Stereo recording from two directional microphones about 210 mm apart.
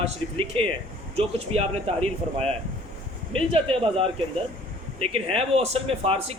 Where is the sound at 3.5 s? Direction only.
25° right (ahead or behind).